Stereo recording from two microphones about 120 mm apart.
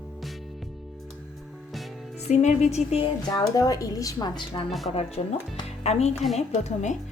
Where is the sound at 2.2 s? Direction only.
70° left (ahead or behind).